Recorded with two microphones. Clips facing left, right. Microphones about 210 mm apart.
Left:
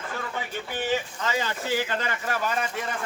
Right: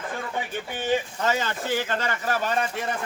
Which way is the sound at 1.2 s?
50° right (ahead or behind).